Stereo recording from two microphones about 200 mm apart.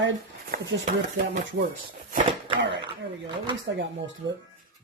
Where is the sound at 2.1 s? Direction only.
30° right (ahead or behind).